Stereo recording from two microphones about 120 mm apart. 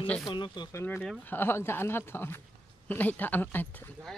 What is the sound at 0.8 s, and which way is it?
Speech, 15° left (ahead or behind).